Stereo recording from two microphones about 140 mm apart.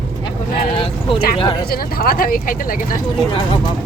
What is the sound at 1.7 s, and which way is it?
Speech, 90° left.